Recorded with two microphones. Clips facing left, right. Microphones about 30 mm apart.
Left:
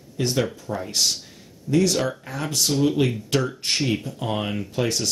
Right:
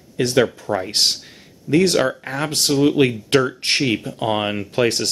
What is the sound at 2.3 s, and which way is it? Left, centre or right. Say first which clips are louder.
Speech: right 4 dB; right.